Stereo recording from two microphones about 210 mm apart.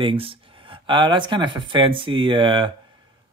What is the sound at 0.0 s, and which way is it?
Speech, 25° right (ahead or behind).